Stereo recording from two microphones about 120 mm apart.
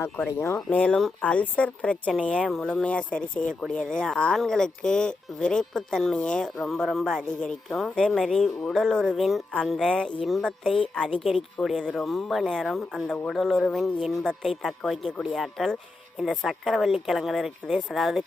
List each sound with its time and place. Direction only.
0.5 s a woman's voice: 10° left (ahead or behind)